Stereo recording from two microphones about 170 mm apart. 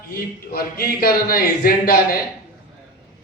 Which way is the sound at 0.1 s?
60° left (ahead or behind).